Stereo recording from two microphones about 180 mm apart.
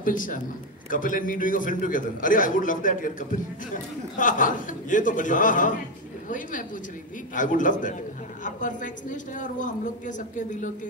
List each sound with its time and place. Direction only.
0.0 s a man's voice: 50° left (ahead or behind)